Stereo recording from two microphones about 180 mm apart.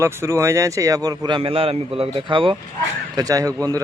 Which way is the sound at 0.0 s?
15° right (ahead or behind).